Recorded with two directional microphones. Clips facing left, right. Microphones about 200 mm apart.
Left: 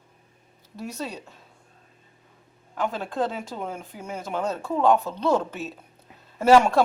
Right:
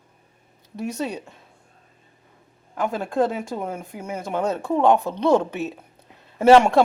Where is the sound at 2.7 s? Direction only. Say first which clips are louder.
Right 4 dB; 10° right (ahead or behind).